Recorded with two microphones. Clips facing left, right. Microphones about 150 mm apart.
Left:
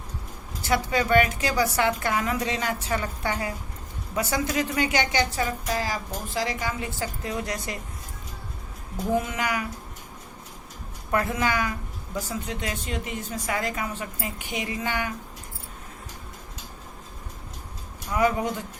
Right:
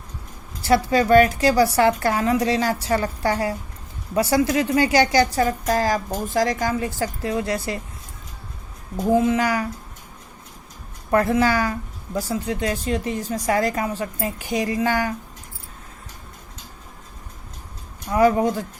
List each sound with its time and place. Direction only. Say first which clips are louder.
0.6 s a woman's voice: right 6 dB; 35° right (ahead or behind)
9.1 s a woman's voice: right 8 dB; 30° right (ahead or behind)
11.1 s a woman's voice: right 7 dB; 35° right (ahead or behind)
18.1 s a woman's voice: right 6 dB; 35° right (ahead or behind)